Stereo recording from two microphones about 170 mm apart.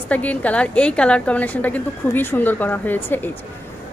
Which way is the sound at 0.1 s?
10° left (ahead or behind).